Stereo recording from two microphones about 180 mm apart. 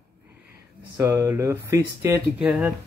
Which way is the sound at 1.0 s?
15° right (ahead or behind).